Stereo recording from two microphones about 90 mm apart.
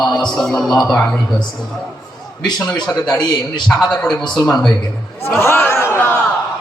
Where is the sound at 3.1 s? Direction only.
10° left (ahead or behind).